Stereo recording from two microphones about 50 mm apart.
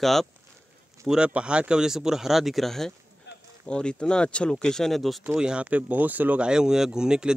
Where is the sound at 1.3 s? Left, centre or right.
Right; by 2.9 s centre.